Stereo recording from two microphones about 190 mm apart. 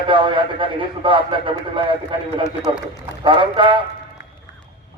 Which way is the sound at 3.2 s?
25° right (ahead or behind).